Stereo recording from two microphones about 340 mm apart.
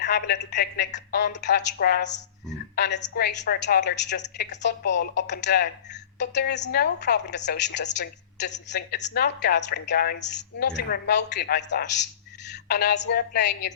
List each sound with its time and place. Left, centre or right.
0.0 s a woman's voice: left